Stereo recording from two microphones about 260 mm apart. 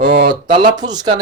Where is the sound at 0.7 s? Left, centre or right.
Centre.